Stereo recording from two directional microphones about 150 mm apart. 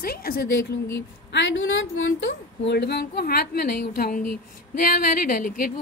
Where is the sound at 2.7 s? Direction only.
90° left.